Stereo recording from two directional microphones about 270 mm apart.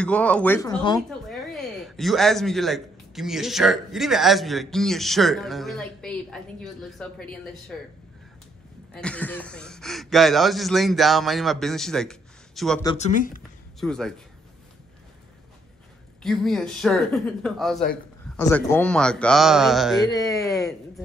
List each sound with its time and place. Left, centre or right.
0.0 s speech: centre
1.3 s speech: centre
8.9 s speech: centre
12.8 s speech: left
13.7 s a man's voice: centre
16.2 s speech: centre